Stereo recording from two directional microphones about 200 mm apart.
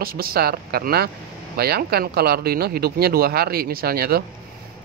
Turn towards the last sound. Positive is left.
turn(degrees=-50)  # may be behind; listen again after turning